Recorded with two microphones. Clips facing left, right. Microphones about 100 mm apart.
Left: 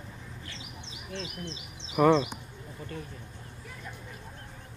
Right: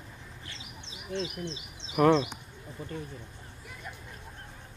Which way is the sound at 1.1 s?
20° right (ahead or behind).